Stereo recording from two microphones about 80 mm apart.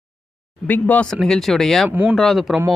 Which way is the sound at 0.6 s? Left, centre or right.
Left.